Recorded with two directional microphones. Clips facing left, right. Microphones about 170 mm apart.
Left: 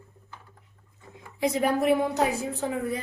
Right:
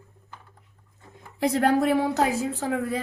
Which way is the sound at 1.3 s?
65° right (ahead or behind).